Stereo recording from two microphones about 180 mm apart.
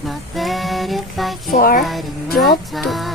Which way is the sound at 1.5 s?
55° left (ahead or behind).